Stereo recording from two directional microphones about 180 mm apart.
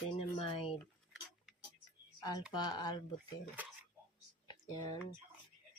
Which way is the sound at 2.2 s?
20° left (ahead or behind).